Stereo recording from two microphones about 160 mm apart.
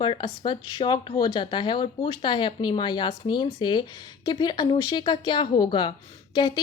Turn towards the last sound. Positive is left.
turn(degrees=30)  # may be behind; listen again after turning